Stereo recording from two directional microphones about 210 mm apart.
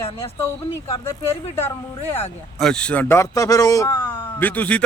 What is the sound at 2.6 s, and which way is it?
A man's voice, 5° left (ahead or behind).